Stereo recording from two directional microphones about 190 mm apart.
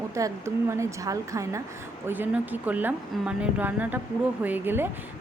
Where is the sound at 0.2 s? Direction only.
15° right (ahead or behind).